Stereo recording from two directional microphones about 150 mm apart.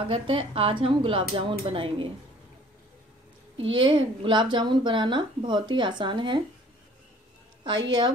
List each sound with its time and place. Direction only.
0.0 s a woman's voice: 35° right (ahead or behind)
3.5 s a woman's voice: 35° right (ahead or behind)
7.6 s a woman's voice: 30° right (ahead or behind)